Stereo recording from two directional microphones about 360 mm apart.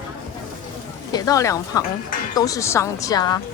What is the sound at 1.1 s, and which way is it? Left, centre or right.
A woman's voice, centre.